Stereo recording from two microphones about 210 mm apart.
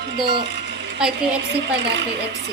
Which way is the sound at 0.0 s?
55° right (ahead or behind).